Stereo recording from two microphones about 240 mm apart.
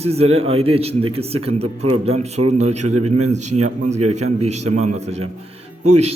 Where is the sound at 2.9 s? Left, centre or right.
Right.